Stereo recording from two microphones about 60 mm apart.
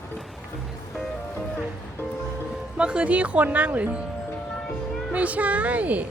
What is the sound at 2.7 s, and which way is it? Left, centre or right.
Speech, centre.